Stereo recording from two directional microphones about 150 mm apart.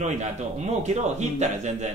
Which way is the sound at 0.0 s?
50° right (ahead or behind).